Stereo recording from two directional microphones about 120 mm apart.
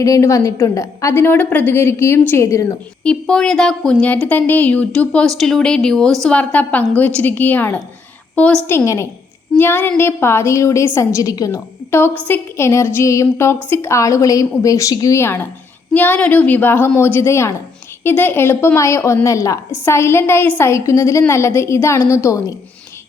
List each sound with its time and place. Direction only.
0.0 s a woman's voice: 25° left (ahead or behind)
3.0 s a woman's voice: 5° left (ahead or behind); by 22.5 s 25° left (ahead or behind)